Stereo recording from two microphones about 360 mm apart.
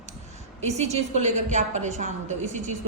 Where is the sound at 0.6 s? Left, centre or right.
Centre.